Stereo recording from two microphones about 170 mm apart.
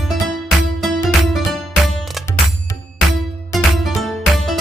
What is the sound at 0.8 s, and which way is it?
Music, centre (ahead or behind).